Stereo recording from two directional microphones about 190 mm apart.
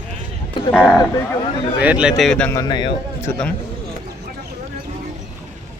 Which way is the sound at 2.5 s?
20° left (ahead or behind).